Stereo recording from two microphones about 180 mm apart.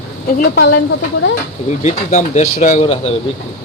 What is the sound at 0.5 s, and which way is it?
Speech, 90° left.